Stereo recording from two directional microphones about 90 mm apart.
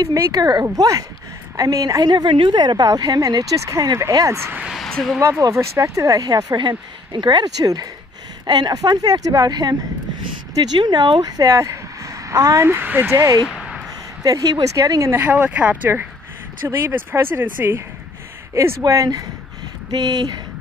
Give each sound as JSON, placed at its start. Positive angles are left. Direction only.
{"t": 0.0, "sound": "speech", "side_deg": -40}
{"t": 2.3, "sound": "speech", "side_deg": -60}
{"t": 4.6, "sound": "speech", "side_deg": 5}
{"t": 5.4, "sound": "speech", "side_deg": -35}
{"t": 13.6, "sound": "a sound", "side_deg": -5}
{"t": 14.2, "sound": "speech", "side_deg": -40}